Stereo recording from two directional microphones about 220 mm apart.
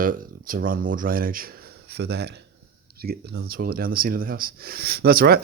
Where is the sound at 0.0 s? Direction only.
40° right (ahead or behind).